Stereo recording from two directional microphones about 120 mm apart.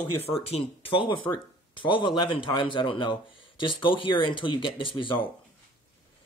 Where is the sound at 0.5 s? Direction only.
50° left (ahead or behind).